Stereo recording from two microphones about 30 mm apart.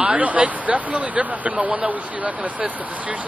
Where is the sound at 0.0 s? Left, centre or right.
Right.